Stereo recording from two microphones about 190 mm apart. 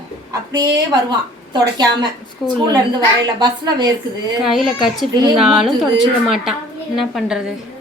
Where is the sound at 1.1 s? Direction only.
25° right (ahead or behind).